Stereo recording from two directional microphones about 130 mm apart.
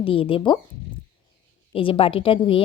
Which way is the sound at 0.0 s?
45° left (ahead or behind).